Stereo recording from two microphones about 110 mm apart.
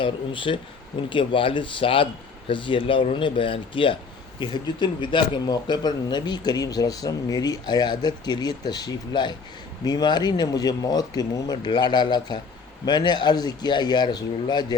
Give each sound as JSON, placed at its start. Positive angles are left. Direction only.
{"t": 0.0, "sound": "speech", "side_deg": 50}
{"t": 4.4, "sound": "speech", "side_deg": 45}